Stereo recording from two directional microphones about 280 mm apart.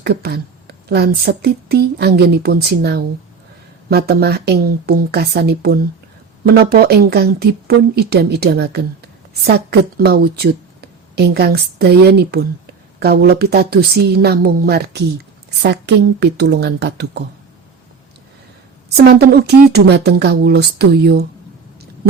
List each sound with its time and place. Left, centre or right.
0.0 s speech: right
18.9 s speech: right